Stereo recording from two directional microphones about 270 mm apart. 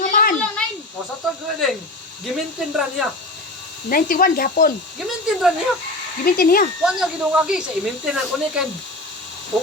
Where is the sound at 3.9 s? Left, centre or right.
Left.